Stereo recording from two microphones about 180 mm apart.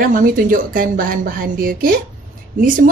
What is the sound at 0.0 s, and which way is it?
Speech, 50° right (ahead or behind).